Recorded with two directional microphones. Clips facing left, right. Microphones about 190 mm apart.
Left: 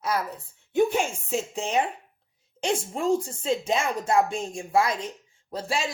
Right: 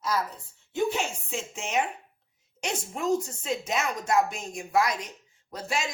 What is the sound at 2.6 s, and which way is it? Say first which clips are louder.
A woman's voice: left 5 dB; 30° left (ahead or behind).